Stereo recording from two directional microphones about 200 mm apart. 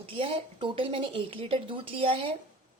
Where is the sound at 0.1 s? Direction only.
25° right (ahead or behind).